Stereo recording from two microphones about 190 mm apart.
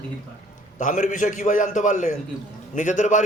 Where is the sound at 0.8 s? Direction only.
40° left (ahead or behind).